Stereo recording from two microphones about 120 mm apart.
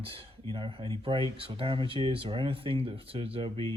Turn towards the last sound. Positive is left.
turn(degrees=-50)  # may be behind; listen again after turning